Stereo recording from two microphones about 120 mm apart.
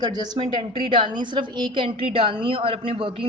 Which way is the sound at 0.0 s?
35° right (ahead or behind).